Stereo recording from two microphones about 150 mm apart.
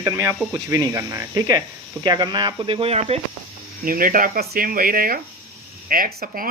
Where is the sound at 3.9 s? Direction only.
65° right (ahead or behind).